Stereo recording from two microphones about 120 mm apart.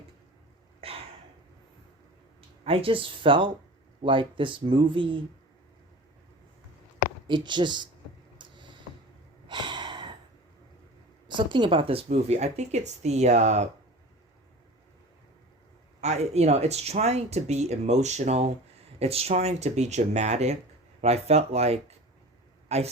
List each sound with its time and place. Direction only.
0.8 s a sound: 55° right (ahead or behind)
2.6 s speech: 50° right (ahead or behind)
7.3 s speech: 40° right (ahead or behind)
8.4 s a sound: 40° right (ahead or behind)
11.3 s speech: 40° right (ahead or behind)
12.0 s speech: 65° right (ahead or behind)
16.0 s speech: 70° right (ahead or behind)
18.9 s speech: 55° right (ahead or behind)